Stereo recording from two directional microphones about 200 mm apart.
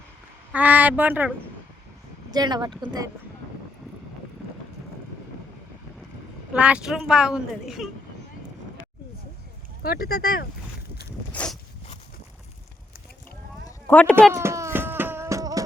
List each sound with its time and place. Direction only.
0.5 s a woman's voice: 10° right (ahead or behind)
2.3 s speech: 20° right (ahead or behind)
6.5 s a woman's voice: 5° right (ahead or behind)
9.8 s speech: 50° left (ahead or behind)
11.3 s a sound: 5° left (ahead or behind)
13.7 s a sound: 10° left (ahead or behind)
14.3 s music: 15° right (ahead or behind)